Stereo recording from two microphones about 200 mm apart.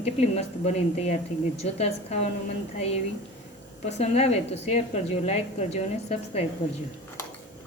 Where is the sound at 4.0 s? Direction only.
30° left (ahead or behind).